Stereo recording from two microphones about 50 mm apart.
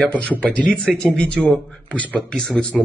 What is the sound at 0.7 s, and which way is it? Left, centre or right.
A man's voice, centre.